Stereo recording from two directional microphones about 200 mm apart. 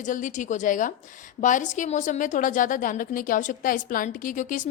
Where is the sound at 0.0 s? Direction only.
40° left (ahead or behind).